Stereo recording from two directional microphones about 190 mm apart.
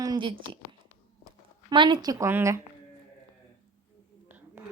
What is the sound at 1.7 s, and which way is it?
Speech, 25° right (ahead or behind).